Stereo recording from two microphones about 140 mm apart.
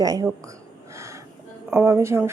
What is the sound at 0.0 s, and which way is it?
Speech, 25° right (ahead or behind).